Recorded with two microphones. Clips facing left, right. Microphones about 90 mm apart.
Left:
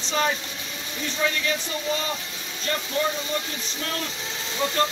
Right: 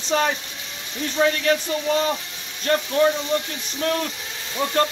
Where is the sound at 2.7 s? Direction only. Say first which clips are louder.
Right 8 dB; 55° right (ahead or behind).